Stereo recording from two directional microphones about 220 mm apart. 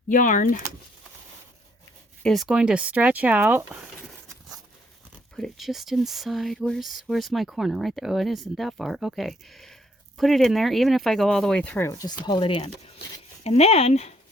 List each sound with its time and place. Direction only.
0.1 s speech: 35° left (ahead or behind)
2.2 s speech: centre (ahead or behind)
5.4 s speech: centre (ahead or behind); by 14.1 s 30° left (ahead or behind)